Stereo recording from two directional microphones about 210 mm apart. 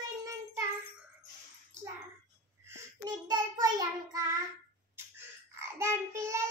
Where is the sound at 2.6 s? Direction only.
15° right (ahead or behind).